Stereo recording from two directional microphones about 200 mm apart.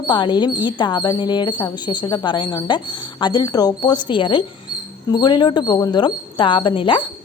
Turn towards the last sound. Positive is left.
turn(degrees=25)  # may be behind; listen again after turning